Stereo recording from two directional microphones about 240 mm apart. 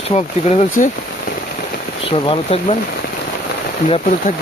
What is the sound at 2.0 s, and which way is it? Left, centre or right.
Speech, left.